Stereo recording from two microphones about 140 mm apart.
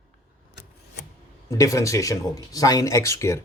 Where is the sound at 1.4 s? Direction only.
20° left (ahead or behind).